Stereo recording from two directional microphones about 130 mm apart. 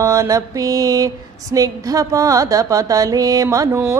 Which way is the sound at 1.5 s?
25° right (ahead or behind).